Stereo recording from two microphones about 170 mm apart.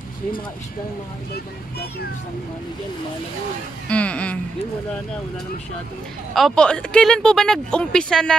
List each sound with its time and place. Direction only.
1.3 s speech: 70° left (ahead or behind)
3.9 s a sound: 5° left (ahead or behind)
6.3 s speech: centre (ahead or behind)